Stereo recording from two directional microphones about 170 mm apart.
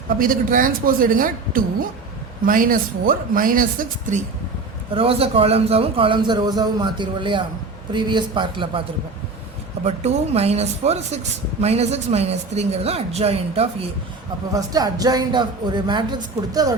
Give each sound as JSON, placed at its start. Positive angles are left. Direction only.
{"t": 0.2, "sound": "speech", "side_deg": -55}
{"t": 4.9, "sound": "a man's voice", "side_deg": -35}
{"t": 9.8, "sound": "speech", "side_deg": -40}
{"t": 14.5, "sound": "a man's voice", "side_deg": -20}